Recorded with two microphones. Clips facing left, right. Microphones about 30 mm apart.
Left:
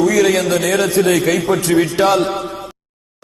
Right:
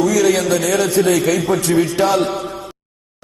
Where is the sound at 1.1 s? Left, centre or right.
Centre.